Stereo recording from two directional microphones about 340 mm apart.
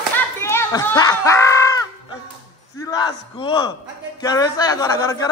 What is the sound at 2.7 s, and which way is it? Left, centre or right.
Speech, centre.